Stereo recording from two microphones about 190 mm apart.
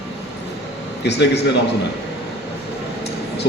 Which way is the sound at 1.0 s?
65° left (ahead or behind).